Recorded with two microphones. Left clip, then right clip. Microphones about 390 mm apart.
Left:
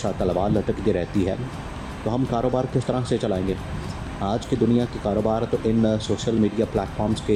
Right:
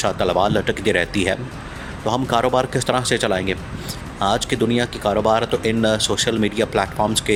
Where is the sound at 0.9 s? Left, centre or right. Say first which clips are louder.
Right 5 dB; right.